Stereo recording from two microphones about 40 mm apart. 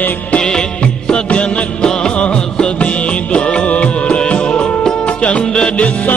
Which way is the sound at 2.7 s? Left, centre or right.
Left.